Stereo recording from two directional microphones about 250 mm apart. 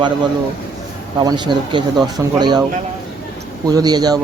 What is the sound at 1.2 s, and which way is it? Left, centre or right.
Speech, centre.